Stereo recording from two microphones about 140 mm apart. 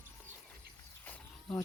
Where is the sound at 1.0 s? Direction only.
15° left (ahead or behind).